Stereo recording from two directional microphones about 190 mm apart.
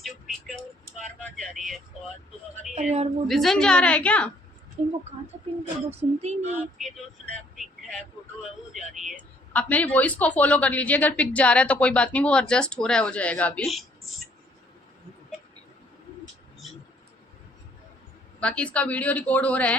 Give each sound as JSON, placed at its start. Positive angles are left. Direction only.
{"t": 1.4, "sound": "a woman's voice", "side_deg": 0}
{"t": 2.7, "sound": "speech", "side_deg": -35}
{"t": 3.2, "sound": "a woman's voice", "side_deg": 0}
{"t": 4.8, "sound": "speech", "side_deg": -35}
{"t": 6.5, "sound": "a woman's voice", "side_deg": -5}
{"t": 7.5, "sound": "vehicle", "side_deg": 0}
{"t": 8.7, "sound": "speech", "side_deg": 0}
{"t": 18.3, "sound": "speech", "side_deg": 5}